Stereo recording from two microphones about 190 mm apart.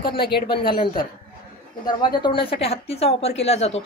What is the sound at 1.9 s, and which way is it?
A woman's voice, 20° left (ahead or behind).